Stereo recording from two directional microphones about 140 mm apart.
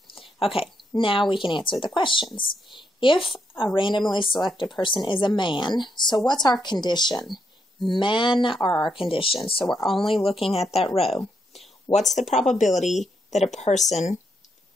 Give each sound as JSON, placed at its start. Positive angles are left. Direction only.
{"t": 0.1, "sound": "a sound", "side_deg": 40}
{"t": 0.9, "sound": "a woman's voice", "side_deg": 40}
{"t": 10.1, "sound": "speech", "side_deg": 0}
{"t": 10.4, "sound": "speech", "side_deg": 45}
{"t": 12.1, "sound": "speech", "side_deg": 55}